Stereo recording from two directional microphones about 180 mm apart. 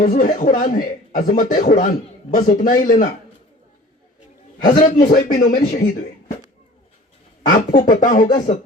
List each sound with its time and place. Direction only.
0.0 s speech: 50° left (ahead or behind)
4.8 s speech: 45° left (ahead or behind)
7.4 s speech: 50° left (ahead or behind)